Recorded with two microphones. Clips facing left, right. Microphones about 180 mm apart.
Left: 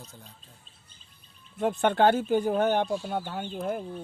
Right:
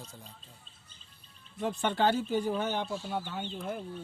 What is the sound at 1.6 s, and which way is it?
Speech, 55° left (ahead or behind).